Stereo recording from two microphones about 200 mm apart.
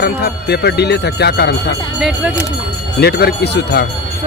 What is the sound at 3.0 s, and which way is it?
Speech, 55° left (ahead or behind).